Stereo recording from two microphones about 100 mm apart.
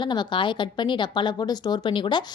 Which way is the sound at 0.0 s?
50° left (ahead or behind).